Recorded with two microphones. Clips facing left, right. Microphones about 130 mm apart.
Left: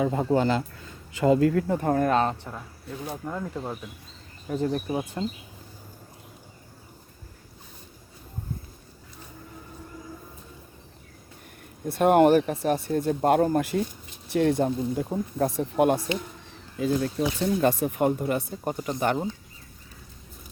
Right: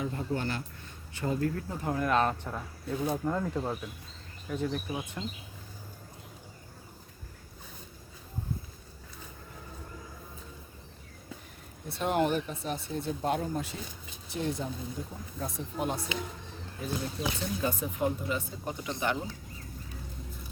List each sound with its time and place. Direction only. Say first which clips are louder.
1.1 s speech: left 11 dB; 90° left; by 2.0 s 55° left (ahead or behind)
2.0 s speech: left 1 dB; 35° left (ahead or behind)
2.5 s speech: right 2 dB; centre (ahead or behind)
4.4 s speech: left 6 dB; 35° left (ahead or behind)
11.9 s speech: left 10 dB; 55° left (ahead or behind); by 16.0 s 80° left
16.8 s speech: left 9 dB; 65° left (ahead or behind); by 19.2 s 45° left (ahead or behind)